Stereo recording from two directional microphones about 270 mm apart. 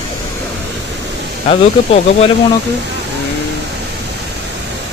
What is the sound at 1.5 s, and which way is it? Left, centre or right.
Speech, left.